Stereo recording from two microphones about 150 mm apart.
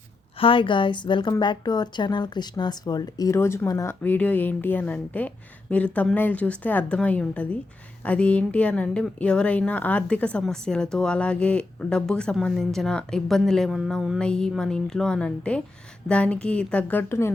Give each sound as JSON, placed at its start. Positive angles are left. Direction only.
{"t": 0.3, "sound": "a woman's voice", "side_deg": 35}